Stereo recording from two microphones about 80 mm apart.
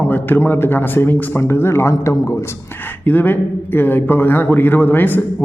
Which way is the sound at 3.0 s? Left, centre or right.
Left.